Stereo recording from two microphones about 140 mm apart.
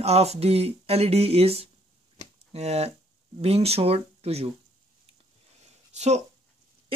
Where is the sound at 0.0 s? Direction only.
50° right (ahead or behind).